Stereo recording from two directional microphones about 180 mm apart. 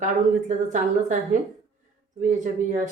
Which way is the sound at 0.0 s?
45° right (ahead or behind).